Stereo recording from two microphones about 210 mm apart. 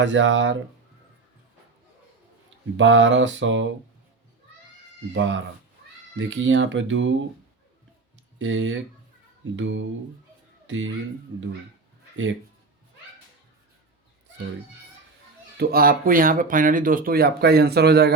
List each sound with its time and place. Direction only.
0.0 s mantra: 60° right (ahead or behind)
2.7 s mantra: 60° right (ahead or behind)
5.1 s mantra: 60° right (ahead or behind)
8.4 s mantra: 65° right (ahead or behind)
12.1 s speech: 65° right (ahead or behind)
15.5 s speech: 45° right (ahead or behind)